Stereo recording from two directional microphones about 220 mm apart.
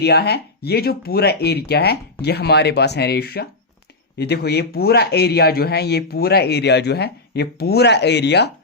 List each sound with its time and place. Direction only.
0.0 s a man's voice: 45° left (ahead or behind)